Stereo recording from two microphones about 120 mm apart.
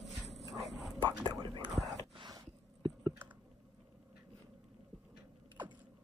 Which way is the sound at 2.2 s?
40° right (ahead or behind).